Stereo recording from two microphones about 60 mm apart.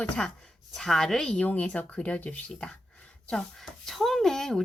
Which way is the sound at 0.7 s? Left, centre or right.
Centre.